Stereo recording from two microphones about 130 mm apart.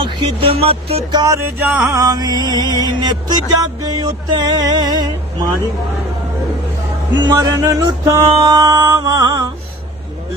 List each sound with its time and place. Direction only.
0.0 s music: 40° right (ahead or behind)
1.1 s music: 25° right (ahead or behind)
7.2 s music: 30° right (ahead or behind)